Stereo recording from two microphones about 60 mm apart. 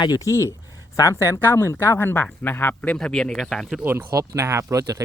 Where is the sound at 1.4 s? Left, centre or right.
Left.